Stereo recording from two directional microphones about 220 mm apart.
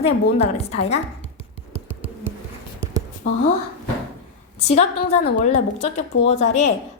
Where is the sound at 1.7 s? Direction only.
10° right (ahead or behind).